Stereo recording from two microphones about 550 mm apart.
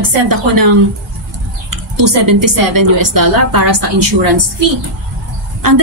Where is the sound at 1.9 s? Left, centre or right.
Right.